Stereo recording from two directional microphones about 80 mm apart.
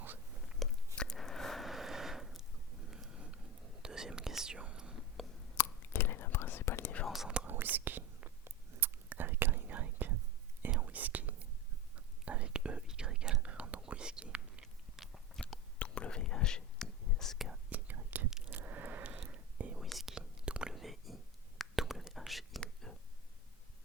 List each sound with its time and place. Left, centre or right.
0.6 s a sound: centre
3.8 s whispering: centre
5.5 s whispering: left
7.1 s whispering: centre
7.4 s whispering: right; by 15.2 s centre
15.8 s whispering: centre
17.7 s whispering: right
18.3 s a sound: centre
18.5 s whispering: right
19.8 s whispering: centre
22.6 s a sound: centre